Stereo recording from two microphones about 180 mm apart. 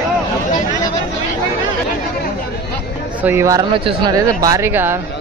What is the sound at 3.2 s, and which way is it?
Speech, 15° right (ahead or behind).